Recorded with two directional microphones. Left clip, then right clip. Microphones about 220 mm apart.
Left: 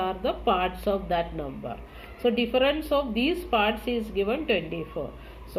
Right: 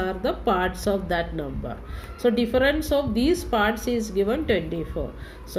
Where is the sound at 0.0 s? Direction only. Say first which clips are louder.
Right 1 dB; 50° right (ahead or behind).